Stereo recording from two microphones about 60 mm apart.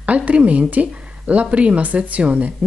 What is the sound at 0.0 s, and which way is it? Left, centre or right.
Speech, right.